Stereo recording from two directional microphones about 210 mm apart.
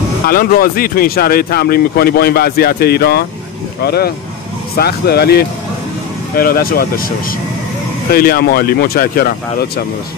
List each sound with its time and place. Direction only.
0.3 s speech: 45° left (ahead or behind)